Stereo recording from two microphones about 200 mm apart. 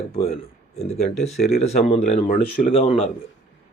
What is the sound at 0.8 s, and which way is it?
Speech, 30° left (ahead or behind).